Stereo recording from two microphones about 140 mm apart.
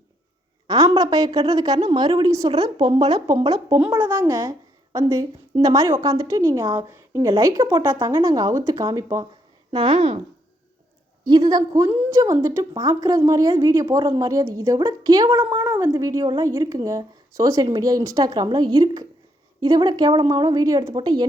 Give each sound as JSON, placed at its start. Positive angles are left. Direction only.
{"t": 0.7, "sound": "speech", "side_deg": -30}
{"t": 3.8, "sound": "speech", "side_deg": -10}
{"t": 9.7, "sound": "speech", "side_deg": -40}
{"t": 11.2, "sound": "speech", "side_deg": -30}